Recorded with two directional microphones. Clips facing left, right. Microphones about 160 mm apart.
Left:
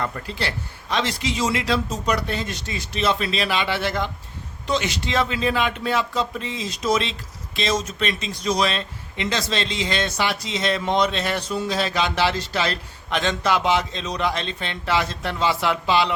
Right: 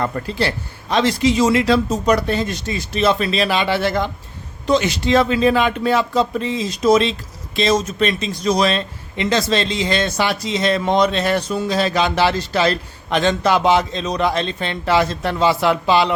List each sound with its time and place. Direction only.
0.0 s speech: 40° right (ahead or behind)